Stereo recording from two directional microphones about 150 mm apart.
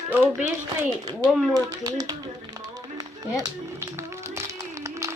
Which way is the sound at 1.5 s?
25° right (ahead or behind).